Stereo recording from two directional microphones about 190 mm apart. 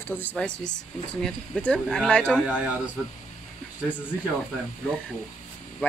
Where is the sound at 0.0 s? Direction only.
10° left (ahead or behind).